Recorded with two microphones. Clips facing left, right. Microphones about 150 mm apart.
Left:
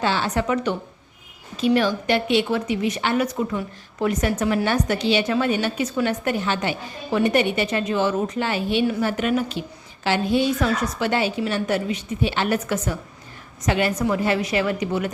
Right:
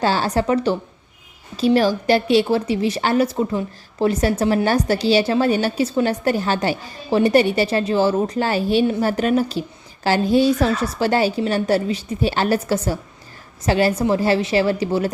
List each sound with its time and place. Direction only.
0.0 s a woman's voice: 40° right (ahead or behind)